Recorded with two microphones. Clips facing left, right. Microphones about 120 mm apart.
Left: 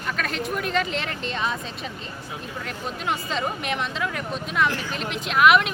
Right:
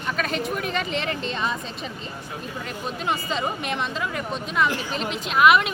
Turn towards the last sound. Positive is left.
turn(degrees=0)  # may be behind; listen again after turning